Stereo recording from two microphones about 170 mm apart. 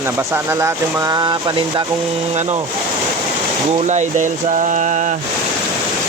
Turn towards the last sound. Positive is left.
turn(degrees=-45)  # may be behind; listen again after turning